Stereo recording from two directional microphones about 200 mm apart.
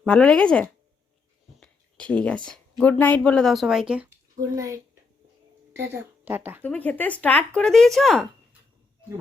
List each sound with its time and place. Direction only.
0.0 s speech: 5° left (ahead or behind)
4.4 s a woman's voice: 15° right (ahead or behind)
6.6 s speech: 10° left (ahead or behind)